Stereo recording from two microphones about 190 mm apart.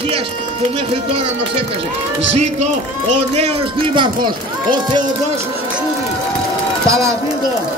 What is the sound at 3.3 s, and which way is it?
Speech, 30° right (ahead or behind).